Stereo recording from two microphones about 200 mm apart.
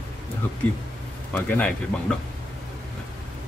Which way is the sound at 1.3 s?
5° left (ahead or behind).